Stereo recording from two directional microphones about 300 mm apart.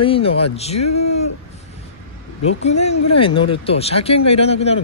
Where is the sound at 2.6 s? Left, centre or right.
Left.